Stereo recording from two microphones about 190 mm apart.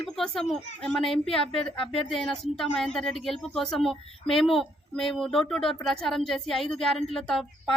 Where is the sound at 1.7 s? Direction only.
30° left (ahead or behind).